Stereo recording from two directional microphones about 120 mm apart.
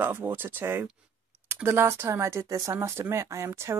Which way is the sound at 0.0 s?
15° right (ahead or behind).